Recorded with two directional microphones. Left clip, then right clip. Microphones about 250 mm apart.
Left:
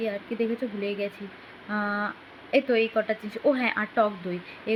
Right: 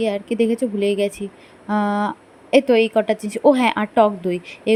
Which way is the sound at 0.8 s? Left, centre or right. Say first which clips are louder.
Right 14 dB; right.